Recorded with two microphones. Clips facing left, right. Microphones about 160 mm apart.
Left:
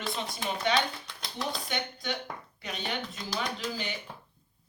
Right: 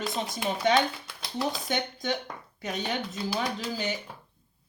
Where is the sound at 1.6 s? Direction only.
45° right (ahead or behind).